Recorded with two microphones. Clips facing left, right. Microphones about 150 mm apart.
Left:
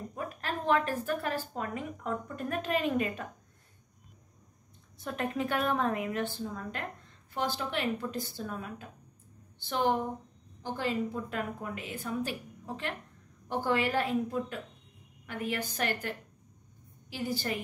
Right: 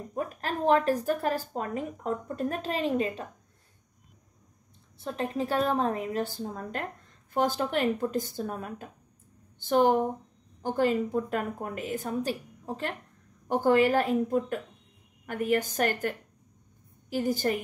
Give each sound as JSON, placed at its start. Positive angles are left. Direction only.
{"t": 0.1, "sound": "a woman's voice", "side_deg": -40}
{"t": 4.9, "sound": "a woman's voice", "side_deg": -30}